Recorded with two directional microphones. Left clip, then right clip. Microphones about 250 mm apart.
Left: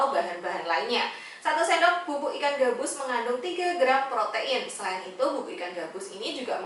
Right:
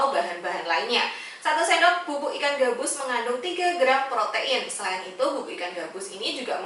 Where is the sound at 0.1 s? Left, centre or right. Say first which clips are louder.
Right 2 dB; centre.